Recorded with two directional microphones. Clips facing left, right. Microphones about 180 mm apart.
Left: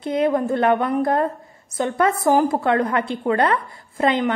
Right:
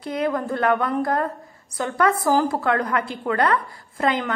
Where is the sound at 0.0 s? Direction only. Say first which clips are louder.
Left 5 dB; 25° left (ahead or behind).